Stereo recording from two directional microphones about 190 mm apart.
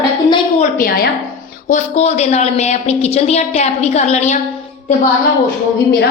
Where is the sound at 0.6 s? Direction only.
50° left (ahead or behind).